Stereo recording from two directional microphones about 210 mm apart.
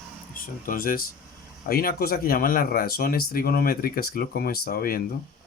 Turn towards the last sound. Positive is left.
turn(degrees=45)  # may be behind; listen again after turning